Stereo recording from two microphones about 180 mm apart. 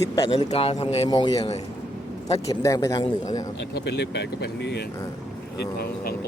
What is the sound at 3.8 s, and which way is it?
Speech, 70° left (ahead or behind).